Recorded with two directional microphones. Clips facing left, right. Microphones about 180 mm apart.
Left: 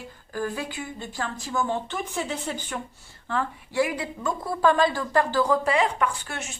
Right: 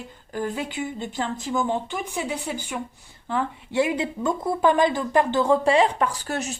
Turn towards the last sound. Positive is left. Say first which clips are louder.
# right 6 dB
turn(degrees=-40)  # may be behind; listen again after turning